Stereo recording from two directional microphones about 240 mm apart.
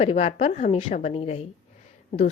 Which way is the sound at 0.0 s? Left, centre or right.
Left.